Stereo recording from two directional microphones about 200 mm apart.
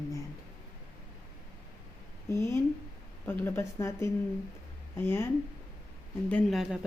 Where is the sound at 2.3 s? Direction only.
15° left (ahead or behind).